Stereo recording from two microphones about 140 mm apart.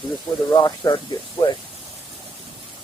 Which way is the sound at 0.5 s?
30° left (ahead or behind).